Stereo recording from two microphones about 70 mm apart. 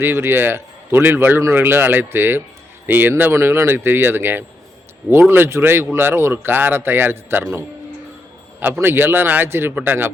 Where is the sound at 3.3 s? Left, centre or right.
Right.